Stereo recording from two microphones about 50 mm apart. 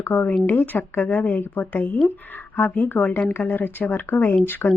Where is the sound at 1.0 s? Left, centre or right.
Left.